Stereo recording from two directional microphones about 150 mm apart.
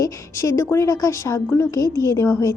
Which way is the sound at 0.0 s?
20° left (ahead or behind).